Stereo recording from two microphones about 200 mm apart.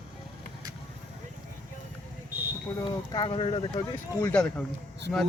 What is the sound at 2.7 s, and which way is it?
Speech, 20° left (ahead or behind).